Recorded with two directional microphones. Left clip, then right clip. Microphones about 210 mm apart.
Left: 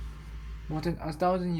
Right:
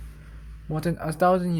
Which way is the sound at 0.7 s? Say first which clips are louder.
Right 5 dB; 55° right (ahead or behind).